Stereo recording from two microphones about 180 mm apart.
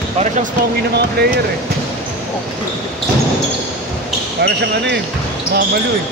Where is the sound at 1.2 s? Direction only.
60° right (ahead or behind).